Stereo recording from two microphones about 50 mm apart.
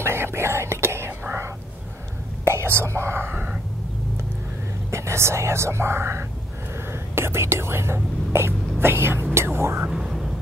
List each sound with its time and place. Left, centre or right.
0.0 s whispering: right
2.4 s whispering: right
4.9 s speech: right
9.8 s music: centre